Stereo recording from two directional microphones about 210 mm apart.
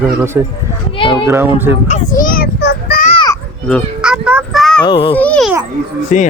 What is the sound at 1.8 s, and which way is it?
Child singing, 35° left (ahead or behind).